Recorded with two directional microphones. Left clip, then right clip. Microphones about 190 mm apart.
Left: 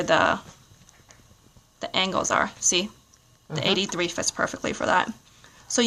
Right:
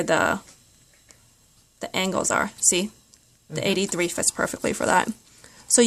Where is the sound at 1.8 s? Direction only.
40° right (ahead or behind).